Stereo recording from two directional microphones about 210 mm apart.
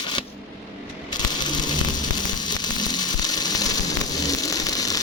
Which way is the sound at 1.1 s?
20° left (ahead or behind).